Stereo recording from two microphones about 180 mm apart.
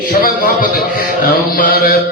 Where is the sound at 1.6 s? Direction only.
55° left (ahead or behind).